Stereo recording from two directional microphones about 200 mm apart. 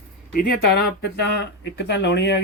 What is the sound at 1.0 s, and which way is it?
Speech, 60° left (ahead or behind).